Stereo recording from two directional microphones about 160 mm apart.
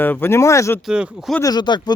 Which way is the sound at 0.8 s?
5° right (ahead or behind).